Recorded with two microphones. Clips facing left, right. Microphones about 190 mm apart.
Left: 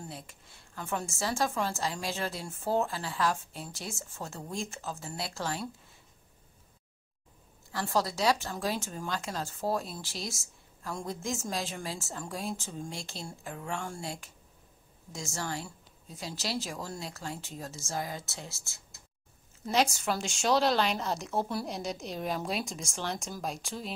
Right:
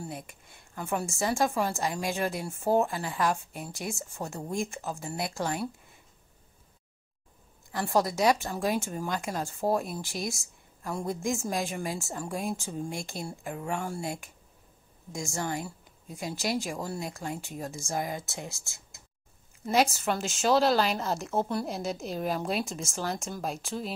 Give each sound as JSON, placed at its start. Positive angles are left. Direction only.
{"t": 0.0, "sound": "a woman's voice", "side_deg": -15}
{"t": 7.7, "sound": "a woman's voice", "side_deg": -15}
{"t": 15.1, "sound": "a woman's voice", "side_deg": -15}
{"t": 19.6, "sound": "a woman's voice", "side_deg": -5}